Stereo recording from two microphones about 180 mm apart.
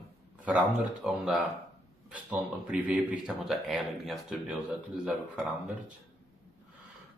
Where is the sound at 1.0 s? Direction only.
5° right (ahead or behind).